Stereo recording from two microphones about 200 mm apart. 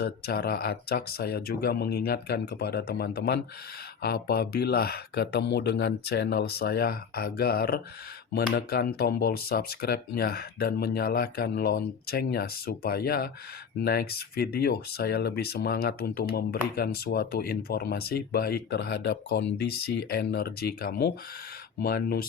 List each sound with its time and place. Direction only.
0.0 s speech: 50° left (ahead or behind)